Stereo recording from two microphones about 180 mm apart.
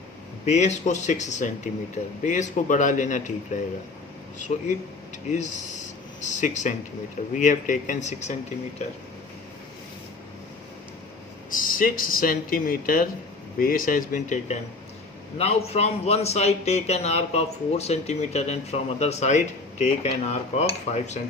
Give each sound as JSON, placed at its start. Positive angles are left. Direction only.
{"t": 0.4, "sound": "a man's voice", "side_deg": 40}
{"t": 5.3, "sound": "a man's voice", "side_deg": 40}
{"t": 11.5, "sound": "a man's voice", "side_deg": 50}